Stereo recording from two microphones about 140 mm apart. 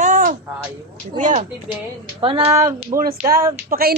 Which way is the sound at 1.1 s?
60° right (ahead or behind).